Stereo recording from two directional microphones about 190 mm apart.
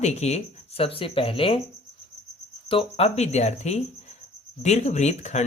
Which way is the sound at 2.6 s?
30° left (ahead or behind).